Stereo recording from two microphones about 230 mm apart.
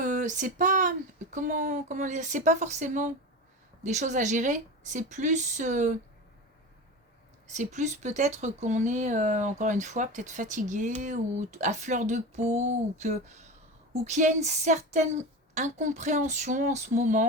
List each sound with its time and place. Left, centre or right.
0.0 s speech: right
7.5 s speech: right